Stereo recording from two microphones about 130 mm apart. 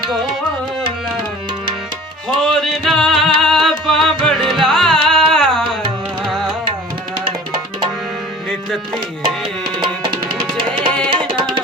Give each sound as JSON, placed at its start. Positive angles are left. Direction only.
{"t": 2.4, "sound": "music", "side_deg": 0}
{"t": 10.6, "sound": "music", "side_deg": -35}